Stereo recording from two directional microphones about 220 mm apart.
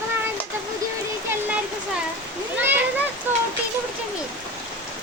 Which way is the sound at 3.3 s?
10° right (ahead or behind).